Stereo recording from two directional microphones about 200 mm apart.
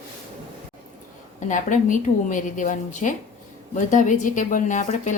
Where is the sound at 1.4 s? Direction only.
40° left (ahead or behind).